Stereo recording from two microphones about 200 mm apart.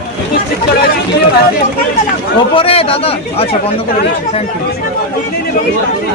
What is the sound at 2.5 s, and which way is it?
Speech, 30° left (ahead or behind).